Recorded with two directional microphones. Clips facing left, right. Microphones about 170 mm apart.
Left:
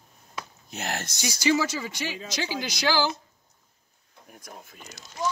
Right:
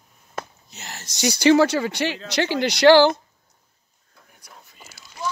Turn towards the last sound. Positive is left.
turn(degrees=50)  # may be behind; listen again after turning